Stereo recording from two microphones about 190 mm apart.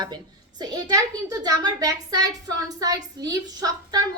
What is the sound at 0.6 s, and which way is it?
A child's voice, 20° right (ahead or behind).